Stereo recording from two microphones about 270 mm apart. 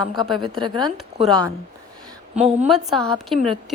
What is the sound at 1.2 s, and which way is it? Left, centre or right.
Speech, centre.